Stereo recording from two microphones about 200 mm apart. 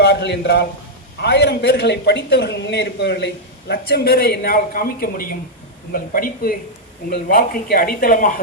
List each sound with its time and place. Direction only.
0.0 s speech: 55° left (ahead or behind)